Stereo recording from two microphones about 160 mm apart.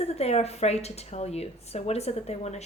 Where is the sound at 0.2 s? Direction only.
40° left (ahead or behind).